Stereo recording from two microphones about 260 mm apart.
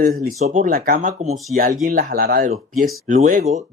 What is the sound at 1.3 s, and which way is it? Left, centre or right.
Speech, centre.